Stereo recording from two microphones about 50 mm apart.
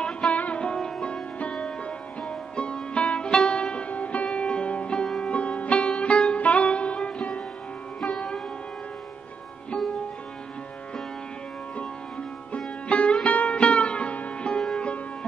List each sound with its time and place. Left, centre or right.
0.3 s music: left
0.7 s music: centre
1.0 s music: centre
12.5 s sitar: left